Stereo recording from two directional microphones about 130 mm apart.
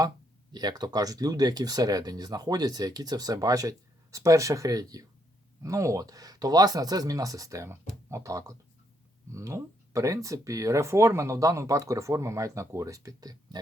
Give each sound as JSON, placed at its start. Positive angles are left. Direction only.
{"t": 0.5, "sound": "speech", "side_deg": -30}